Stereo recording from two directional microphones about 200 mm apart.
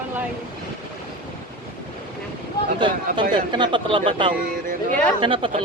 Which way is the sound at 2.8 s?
25° right (ahead or behind).